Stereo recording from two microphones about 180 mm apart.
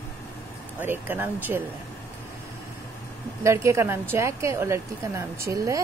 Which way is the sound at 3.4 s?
15° right (ahead or behind).